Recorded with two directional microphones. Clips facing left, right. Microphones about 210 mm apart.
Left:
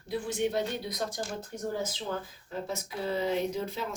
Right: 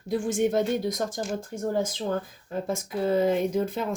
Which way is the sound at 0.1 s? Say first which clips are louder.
Right 6 dB; 50° right (ahead or behind).